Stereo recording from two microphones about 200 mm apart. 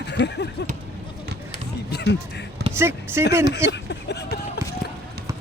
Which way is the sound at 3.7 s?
55° left (ahead or behind).